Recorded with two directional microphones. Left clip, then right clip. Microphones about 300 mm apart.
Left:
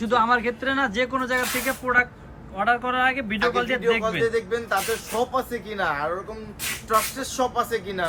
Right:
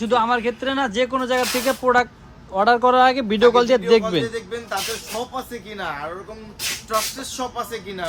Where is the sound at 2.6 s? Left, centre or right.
Centre.